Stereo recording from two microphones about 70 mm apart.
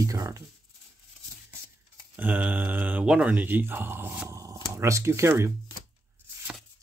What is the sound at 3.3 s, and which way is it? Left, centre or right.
Speech, right.